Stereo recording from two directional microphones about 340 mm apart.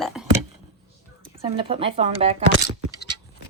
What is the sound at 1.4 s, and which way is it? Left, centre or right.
Speech, centre.